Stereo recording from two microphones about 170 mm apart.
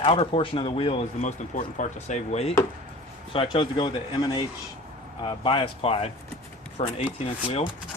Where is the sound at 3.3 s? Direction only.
30° left (ahead or behind).